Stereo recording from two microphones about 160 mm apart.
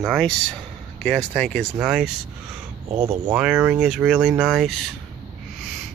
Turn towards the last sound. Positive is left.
turn(degrees=0)  # may be behind; listen again after turning